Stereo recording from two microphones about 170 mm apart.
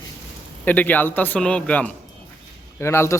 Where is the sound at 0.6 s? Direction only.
10° left (ahead or behind).